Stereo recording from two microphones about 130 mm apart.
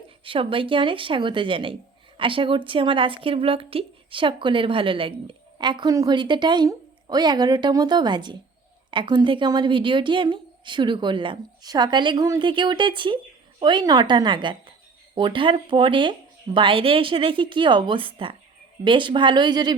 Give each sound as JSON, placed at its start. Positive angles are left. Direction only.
{"t": 0.3, "sound": "a woman's voice", "side_deg": -40}